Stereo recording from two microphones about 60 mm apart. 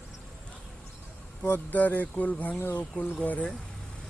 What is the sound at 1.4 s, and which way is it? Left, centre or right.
Speech, left.